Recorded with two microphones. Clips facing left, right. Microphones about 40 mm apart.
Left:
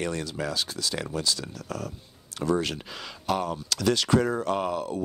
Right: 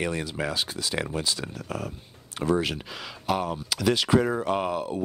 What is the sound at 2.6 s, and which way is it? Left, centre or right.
Speech, centre.